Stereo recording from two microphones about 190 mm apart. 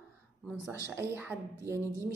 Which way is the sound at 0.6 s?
10° right (ahead or behind).